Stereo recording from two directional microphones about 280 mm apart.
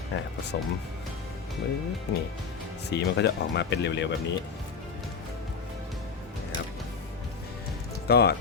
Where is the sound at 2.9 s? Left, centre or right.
Left.